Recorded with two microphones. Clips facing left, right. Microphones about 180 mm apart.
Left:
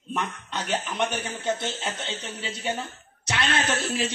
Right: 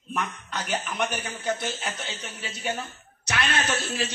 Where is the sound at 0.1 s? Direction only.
25° left (ahead or behind).